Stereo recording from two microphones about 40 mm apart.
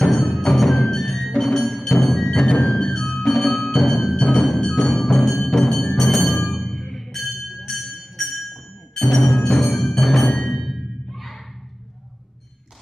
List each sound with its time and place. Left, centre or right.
0.0 s music: centre
4.8 s music: centre
9.1 s music: centre